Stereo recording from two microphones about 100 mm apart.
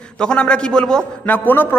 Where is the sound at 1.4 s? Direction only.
20° left (ahead or behind).